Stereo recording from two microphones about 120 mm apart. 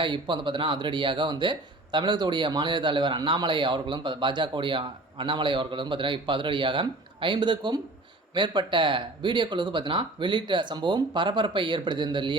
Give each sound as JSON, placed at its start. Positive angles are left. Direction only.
{"t": 0.0, "sound": "speech", "side_deg": -40}